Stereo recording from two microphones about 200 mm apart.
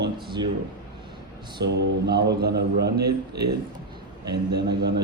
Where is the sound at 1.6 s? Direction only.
60° right (ahead or behind).